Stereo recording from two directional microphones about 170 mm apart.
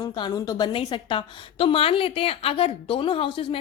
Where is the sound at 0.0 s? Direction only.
25° left (ahead or behind).